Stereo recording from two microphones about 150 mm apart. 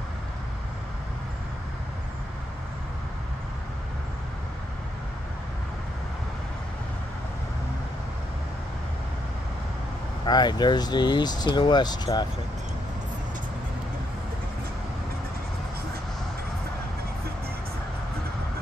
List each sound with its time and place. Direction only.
10.2 s speech: 30° left (ahead or behind)